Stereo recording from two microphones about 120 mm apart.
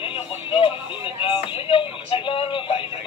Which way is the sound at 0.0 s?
50° left (ahead or behind).